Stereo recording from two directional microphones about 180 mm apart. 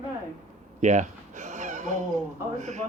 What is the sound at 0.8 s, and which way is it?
Speech, 40° right (ahead or behind).